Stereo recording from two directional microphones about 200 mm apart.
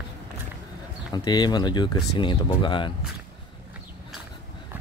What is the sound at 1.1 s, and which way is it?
Speech, 20° left (ahead or behind).